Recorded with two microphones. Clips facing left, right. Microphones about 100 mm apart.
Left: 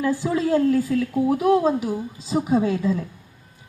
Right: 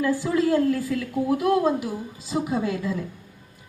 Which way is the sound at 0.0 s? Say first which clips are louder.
Even; 30° left (ahead or behind).